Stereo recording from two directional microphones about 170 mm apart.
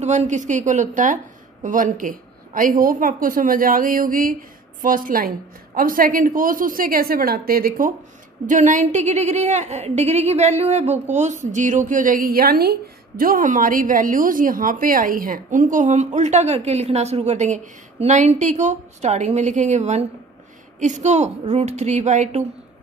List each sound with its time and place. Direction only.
0.0 s a woman's voice: 45° right (ahead or behind)